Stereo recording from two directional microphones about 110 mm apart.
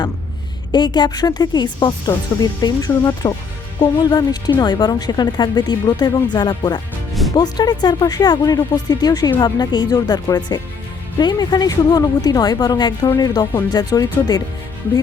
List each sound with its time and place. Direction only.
0.7 s speech: 40° left (ahead or behind)
7.1 s music: centre (ahead or behind)
7.3 s speech: 40° left (ahead or behind)